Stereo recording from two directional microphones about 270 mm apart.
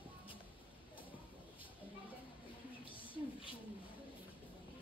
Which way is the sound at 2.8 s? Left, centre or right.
Centre.